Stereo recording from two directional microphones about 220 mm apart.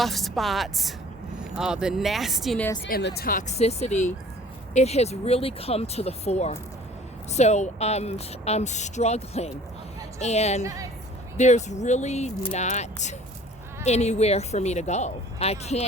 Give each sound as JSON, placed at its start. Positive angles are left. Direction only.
{"t": 0.0, "sound": "speech", "side_deg": 0}
{"t": 2.8, "sound": "speech", "side_deg": 45}
{"t": 10.6, "sound": "a woman's voice", "side_deg": -15}
{"t": 11.3, "sound": "speech", "side_deg": 30}